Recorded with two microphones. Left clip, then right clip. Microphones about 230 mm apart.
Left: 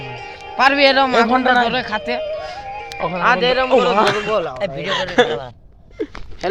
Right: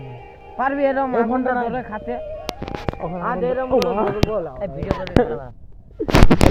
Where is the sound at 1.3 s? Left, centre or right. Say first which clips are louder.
Left 7 dB; left.